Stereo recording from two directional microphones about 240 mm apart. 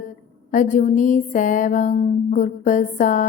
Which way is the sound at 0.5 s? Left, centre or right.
Left.